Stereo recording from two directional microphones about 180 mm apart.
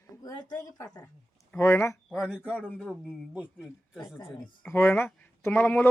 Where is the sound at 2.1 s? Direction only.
5° right (ahead or behind).